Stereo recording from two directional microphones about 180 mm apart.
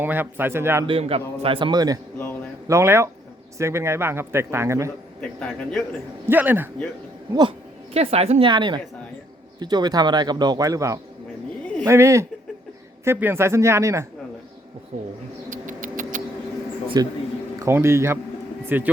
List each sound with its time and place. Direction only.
0.0 s speech: 10° right (ahead or behind)
0.9 s a woman's voice: 30° right (ahead or behind)
2.1 s a man's voice: 10° left (ahead or behind)
2.6 s speech: 15° right (ahead or behind)
5.2 s a man's voice: 5° left (ahead or behind)
6.2 s speech: 10° right (ahead or behind)
7.9 s a woman's voice: 35° right (ahead or behind); by 14.1 s 15° right (ahead or behind)
14.9 s a sound: 40° right (ahead or behind)
15.4 s music: 45° right (ahead or behind)
16.9 s speech: 20° right (ahead or behind)